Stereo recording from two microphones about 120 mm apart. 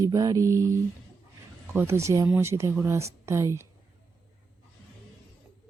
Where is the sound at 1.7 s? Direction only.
20° right (ahead or behind).